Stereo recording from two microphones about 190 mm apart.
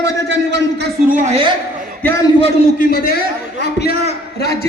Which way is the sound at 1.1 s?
40° right (ahead or behind).